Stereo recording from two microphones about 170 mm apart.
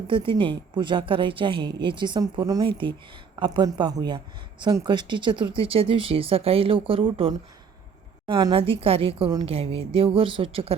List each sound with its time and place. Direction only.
0.1 s a woman's voice: 30° right (ahead or behind)